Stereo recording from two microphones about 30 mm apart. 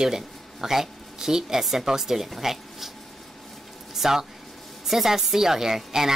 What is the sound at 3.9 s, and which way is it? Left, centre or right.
Speech, centre.